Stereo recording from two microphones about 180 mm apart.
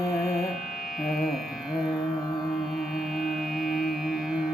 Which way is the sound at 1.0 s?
Centre (ahead or behind).